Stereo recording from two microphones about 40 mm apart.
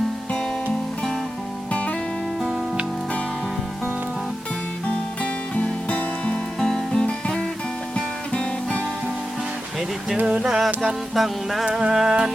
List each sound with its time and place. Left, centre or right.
5.2 s music: left
6.6 s music: centre
7.0 s music: left
7.9 s guitar: left
10.2 s a sound: right
11.1 s music: centre
11.7 s music: centre